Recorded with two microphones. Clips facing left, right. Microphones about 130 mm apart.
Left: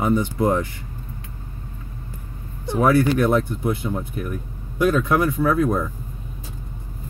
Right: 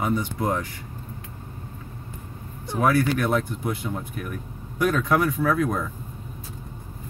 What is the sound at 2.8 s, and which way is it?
Speech, 25° left (ahead or behind).